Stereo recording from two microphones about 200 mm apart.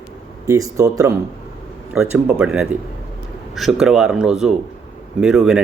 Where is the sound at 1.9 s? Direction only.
5° right (ahead or behind).